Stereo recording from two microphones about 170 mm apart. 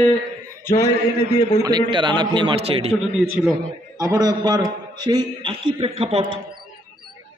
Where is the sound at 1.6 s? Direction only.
25° right (ahead or behind).